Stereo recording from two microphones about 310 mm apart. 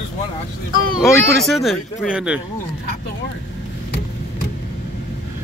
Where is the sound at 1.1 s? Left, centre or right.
Centre.